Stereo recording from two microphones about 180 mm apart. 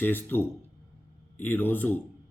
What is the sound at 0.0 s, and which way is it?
Speech, 10° left (ahead or behind).